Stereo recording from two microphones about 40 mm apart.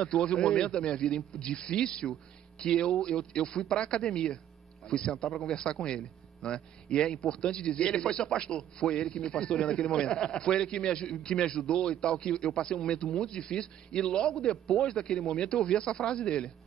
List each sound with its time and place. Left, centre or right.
0.0 s a man's voice: left